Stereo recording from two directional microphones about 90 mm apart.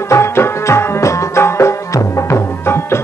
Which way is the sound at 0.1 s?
30° left (ahead or behind).